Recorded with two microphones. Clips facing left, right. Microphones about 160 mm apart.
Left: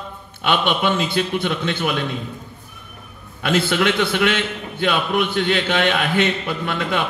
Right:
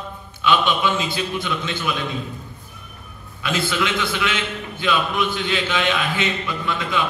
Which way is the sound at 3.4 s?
60° left (ahead or behind).